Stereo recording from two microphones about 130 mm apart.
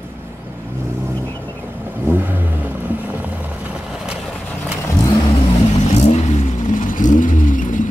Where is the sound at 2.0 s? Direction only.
15° right (ahead or behind).